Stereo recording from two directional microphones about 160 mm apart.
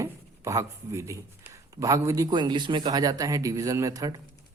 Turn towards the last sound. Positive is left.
turn(degrees=-20)  # may be behind; listen again after turning